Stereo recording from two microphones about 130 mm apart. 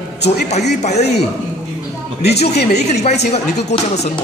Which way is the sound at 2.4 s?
55° left (ahead or behind).